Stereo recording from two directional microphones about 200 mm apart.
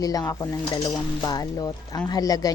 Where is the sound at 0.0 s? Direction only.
20° left (ahead or behind).